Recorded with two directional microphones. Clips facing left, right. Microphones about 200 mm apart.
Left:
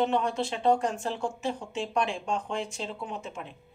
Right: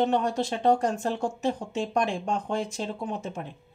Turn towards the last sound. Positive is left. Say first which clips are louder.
# right 4 dB
turn(degrees=-40)  # may be behind; listen again after turning